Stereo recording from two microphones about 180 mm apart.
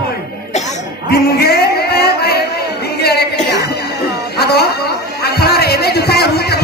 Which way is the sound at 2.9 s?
65° left (ahead or behind).